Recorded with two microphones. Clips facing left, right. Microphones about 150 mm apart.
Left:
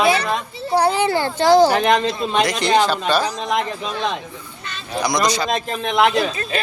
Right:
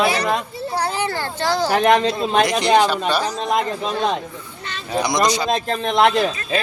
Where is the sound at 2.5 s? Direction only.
15° right (ahead or behind).